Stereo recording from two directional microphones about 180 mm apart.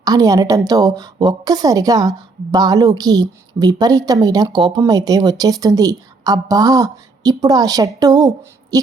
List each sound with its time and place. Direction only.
0.0 s a woman's voice: 20° right (ahead or behind)